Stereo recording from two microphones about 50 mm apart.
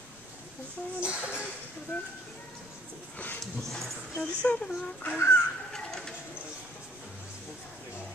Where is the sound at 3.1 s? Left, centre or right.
Left.